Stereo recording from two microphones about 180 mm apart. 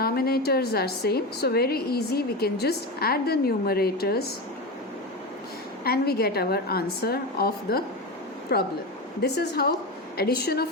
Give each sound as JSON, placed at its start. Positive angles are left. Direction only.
{"t": 0.0, "sound": "a woman's voice", "side_deg": 60}
{"t": 5.8, "sound": "a woman's voice", "side_deg": 60}